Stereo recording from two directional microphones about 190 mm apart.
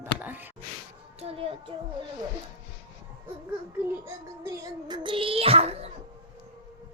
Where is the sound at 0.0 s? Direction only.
10° right (ahead or behind).